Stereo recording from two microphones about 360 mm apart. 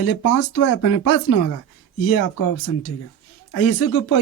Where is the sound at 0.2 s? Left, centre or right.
Left.